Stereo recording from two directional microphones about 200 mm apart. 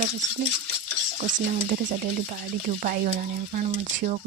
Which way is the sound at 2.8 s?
40° right (ahead or behind).